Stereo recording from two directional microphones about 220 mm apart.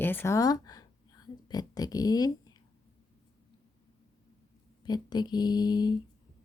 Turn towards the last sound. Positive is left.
turn(degrees=20)  # may be behind; listen again after turning